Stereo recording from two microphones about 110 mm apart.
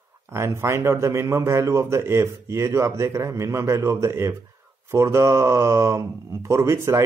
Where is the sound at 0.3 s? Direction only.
25° right (ahead or behind).